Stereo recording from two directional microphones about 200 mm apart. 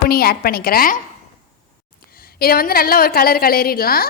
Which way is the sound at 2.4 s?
50° left (ahead or behind).